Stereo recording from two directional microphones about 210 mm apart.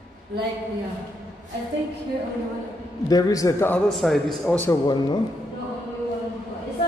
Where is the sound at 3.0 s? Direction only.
15° left (ahead or behind).